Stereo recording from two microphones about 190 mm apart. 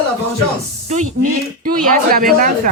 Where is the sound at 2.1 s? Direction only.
50° right (ahead or behind).